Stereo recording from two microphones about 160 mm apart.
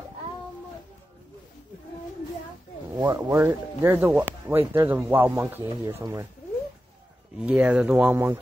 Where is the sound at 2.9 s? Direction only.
20° right (ahead or behind).